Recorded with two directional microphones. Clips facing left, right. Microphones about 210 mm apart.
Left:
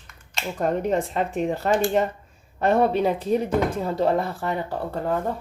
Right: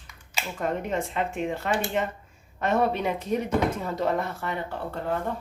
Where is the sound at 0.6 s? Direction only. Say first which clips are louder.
Left 5 dB; 40° left (ahead or behind).